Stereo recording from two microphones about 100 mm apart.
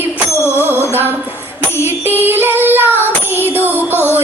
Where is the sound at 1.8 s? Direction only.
20° right (ahead or behind).